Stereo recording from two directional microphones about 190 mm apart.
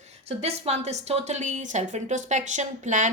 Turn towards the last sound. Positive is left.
turn(degrees=-40)  # may be behind; listen again after turning